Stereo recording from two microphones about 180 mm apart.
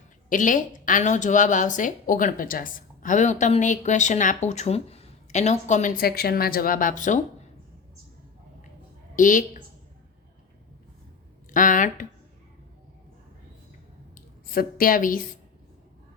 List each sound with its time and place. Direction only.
0.3 s speech: 45° left (ahead or behind)
9.1 s speech: 45° left (ahead or behind)
11.5 s speech: 45° left (ahead or behind)
14.4 s speech: 55° left (ahead or behind)